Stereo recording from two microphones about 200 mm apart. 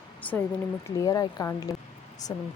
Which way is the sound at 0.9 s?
15° left (ahead or behind).